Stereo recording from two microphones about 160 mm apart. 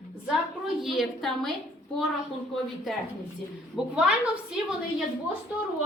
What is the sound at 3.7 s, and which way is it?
Speech, 5° right (ahead or behind).